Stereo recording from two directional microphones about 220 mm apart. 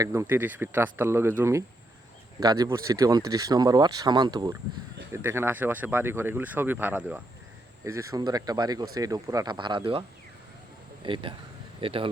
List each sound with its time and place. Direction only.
0.0 s speech: 10° right (ahead or behind)
11.0 s speech: 20° right (ahead or behind)